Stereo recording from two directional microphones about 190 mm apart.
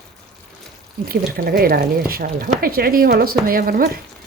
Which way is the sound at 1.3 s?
50° right (ahead or behind).